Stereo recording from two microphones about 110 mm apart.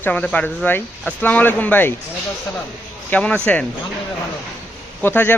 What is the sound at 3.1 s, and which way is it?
Speech, 10° left (ahead or behind).